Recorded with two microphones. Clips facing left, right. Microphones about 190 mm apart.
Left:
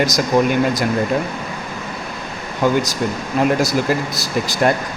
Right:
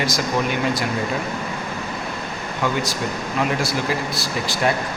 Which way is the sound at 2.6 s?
40° left (ahead or behind).